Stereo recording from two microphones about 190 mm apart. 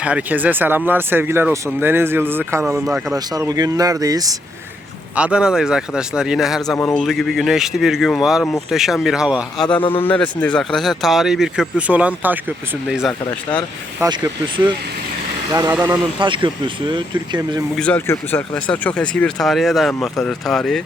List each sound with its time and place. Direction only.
0.0 s speech: 5° right (ahead or behind)
5.1 s speech: 5° right (ahead or behind)
6.7 s a man's voice: 10° left (ahead or behind)
7.0 s speech: centre (ahead or behind)
10.0 s speech: 5° left (ahead or behind)
14.0 s speech: 25° right (ahead or behind)
16.2 s speech: 25° right (ahead or behind)
17.7 s speech: 5° left (ahead or behind)